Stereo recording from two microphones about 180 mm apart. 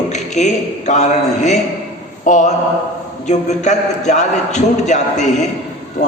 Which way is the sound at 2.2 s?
45° left (ahead or behind).